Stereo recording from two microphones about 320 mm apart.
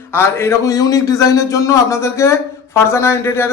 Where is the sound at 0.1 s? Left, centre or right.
Centre.